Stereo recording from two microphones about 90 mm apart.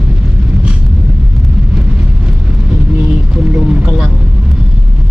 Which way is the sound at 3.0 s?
20° right (ahead or behind).